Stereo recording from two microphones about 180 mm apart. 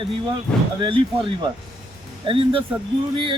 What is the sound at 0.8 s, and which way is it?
Speech, 30° right (ahead or behind).